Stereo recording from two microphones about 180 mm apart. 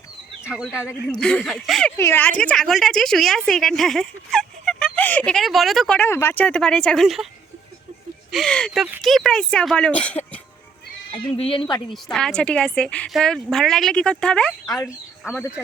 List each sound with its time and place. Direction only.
0.4 s a woman's voice: 5° right (ahead or behind)
2.0 s a woman's voice: 10° left (ahead or behind)
6.0 s a woman's voice: 15° left (ahead or behind)
8.3 s a woman's voice: centre (ahead or behind)
11.1 s speech: 30° left (ahead or behind)
12.1 s a woman's voice: 5° left (ahead or behind)